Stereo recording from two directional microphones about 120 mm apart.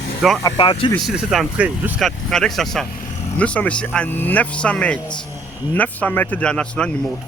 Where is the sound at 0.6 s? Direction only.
45° left (ahead or behind).